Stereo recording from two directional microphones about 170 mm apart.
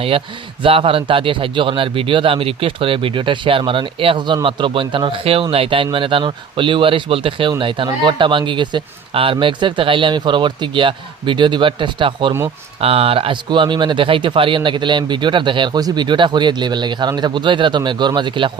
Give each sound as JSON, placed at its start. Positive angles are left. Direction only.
{"t": 0.6, "sound": "a man's voice", "side_deg": -30}